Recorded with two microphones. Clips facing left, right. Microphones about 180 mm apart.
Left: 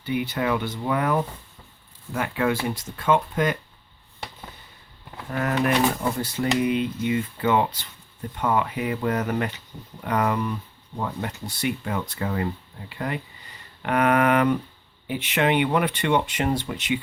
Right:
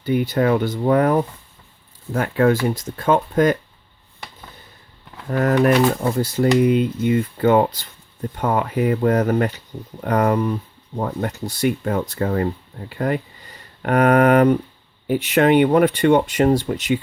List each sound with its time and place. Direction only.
0.0 s speech: 40° right (ahead or behind)
5.3 s speech: 40° right (ahead or behind)